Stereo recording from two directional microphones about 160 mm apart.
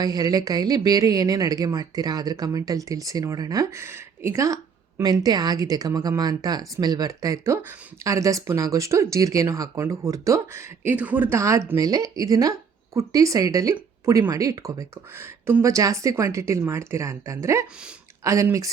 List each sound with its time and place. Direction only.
0.0 s speech: 25° right (ahead or behind)